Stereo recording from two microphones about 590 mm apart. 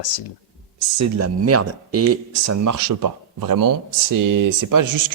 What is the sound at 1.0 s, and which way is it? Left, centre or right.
Speech, right.